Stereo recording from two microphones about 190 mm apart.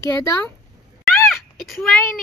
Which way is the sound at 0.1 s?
20° left (ahead or behind).